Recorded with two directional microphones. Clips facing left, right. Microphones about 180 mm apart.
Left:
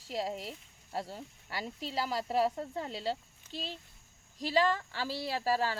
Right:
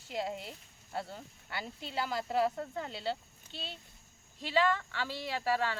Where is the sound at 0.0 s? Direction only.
35° left (ahead or behind).